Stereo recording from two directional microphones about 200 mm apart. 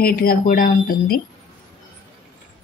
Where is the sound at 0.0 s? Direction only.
45° left (ahead or behind).